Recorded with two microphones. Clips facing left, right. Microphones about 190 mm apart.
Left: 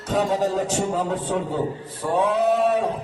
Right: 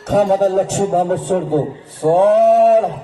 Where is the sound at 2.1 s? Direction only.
70° right (ahead or behind).